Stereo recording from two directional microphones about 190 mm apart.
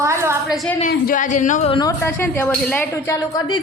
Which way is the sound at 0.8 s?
50° left (ahead or behind).